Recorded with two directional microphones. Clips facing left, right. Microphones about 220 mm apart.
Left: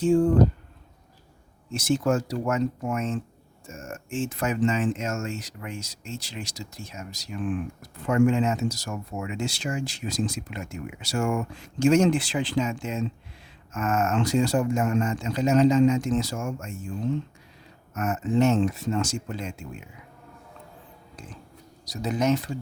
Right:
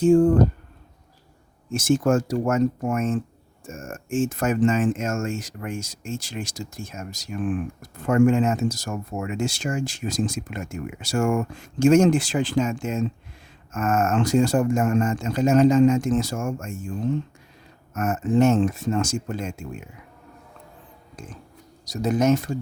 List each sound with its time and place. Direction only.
0.0 s speech: 45° right (ahead or behind)
1.7 s speech: 50° right (ahead or behind)
17.9 s speech: 50° right (ahead or behind)
21.2 s speech: 45° right (ahead or behind)